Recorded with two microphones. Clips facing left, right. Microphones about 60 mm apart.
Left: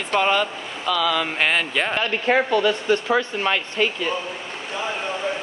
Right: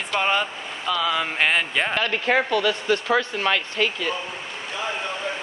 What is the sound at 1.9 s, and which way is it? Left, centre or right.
Speech, left.